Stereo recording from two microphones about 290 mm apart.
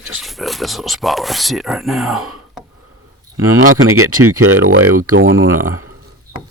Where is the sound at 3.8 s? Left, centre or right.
Right.